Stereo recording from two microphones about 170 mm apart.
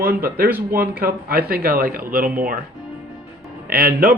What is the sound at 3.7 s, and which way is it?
Speech, 60° right (ahead or behind).